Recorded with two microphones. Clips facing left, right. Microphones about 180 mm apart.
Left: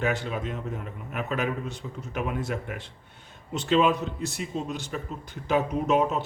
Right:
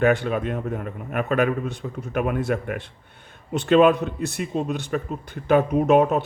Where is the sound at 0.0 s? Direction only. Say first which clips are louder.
Right 8 dB; 55° right (ahead or behind).